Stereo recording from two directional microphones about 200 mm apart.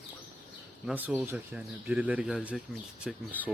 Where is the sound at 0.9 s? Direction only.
10° right (ahead or behind).